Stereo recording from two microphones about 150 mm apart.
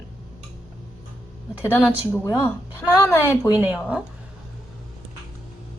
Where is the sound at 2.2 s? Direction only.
20° left (ahead or behind).